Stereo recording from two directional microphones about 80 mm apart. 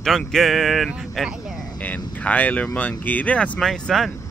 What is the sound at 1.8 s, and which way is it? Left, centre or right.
Speech, centre.